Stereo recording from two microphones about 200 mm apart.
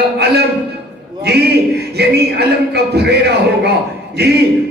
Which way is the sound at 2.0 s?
55° right (ahead or behind).